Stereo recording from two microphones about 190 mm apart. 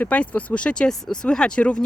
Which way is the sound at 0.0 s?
5° left (ahead or behind).